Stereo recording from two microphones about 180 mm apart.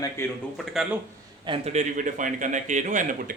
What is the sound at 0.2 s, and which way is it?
Speech, 15° left (ahead or behind).